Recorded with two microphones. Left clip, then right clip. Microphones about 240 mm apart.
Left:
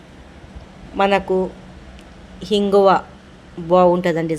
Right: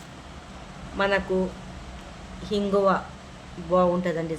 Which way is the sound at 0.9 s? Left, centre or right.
Left.